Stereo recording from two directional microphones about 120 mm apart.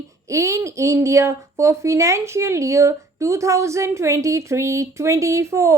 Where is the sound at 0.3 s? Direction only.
25° right (ahead or behind).